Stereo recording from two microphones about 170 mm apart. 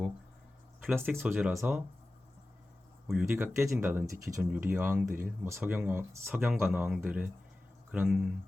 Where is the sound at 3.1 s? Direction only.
5° right (ahead or behind).